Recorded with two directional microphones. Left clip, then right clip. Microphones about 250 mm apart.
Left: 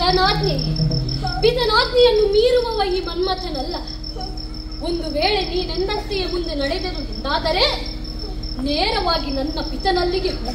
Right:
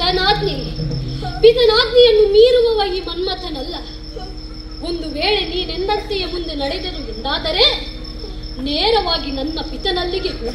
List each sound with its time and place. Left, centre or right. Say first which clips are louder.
0.0 s a woman's voice: right 1 dB; left
4.8 s a woman's voice: right 1 dB; left
8.6 s a woman's voice: right 3 dB; left